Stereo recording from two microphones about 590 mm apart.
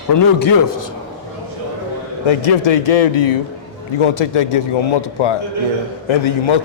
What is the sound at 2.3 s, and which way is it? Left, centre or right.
Speech, left.